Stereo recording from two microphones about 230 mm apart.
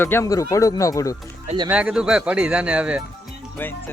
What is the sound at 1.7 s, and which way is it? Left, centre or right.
Speech, centre.